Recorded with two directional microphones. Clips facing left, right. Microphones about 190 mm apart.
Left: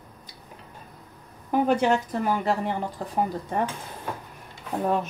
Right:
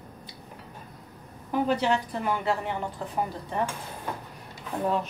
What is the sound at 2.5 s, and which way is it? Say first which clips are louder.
A woman's voice: left 3 dB; 35° left (ahead or behind).